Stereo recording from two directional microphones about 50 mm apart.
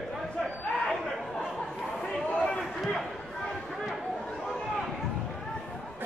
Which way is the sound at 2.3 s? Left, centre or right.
Centre.